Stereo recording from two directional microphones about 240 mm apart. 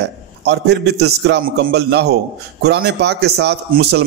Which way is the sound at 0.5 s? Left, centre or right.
Right.